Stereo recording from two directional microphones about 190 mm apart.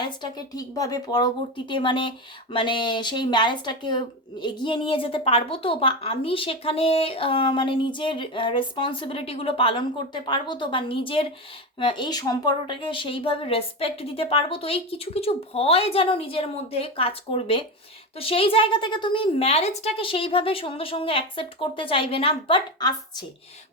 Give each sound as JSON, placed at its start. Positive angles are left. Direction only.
{"t": 0.0, "sound": "speech", "side_deg": 20}